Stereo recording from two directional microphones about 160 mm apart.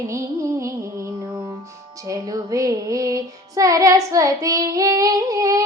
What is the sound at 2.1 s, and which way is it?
Child singing, 20° right (ahead or behind).